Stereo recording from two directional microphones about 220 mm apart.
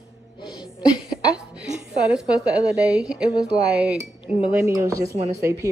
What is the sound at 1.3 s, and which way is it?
A woman's voice, 5° right (ahead or behind).